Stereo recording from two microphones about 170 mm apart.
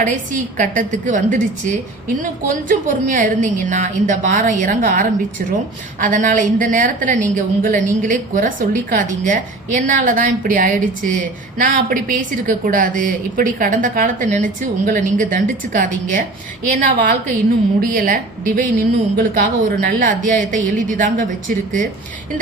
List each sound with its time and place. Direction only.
0.0 s a woman's voice: 50° right (ahead or behind)